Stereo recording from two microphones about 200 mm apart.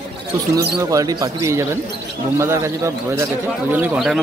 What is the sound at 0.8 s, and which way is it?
Speech, 15° right (ahead or behind).